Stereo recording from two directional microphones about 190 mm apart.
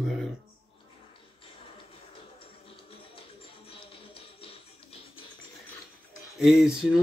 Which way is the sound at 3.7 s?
30° left (ahead or behind).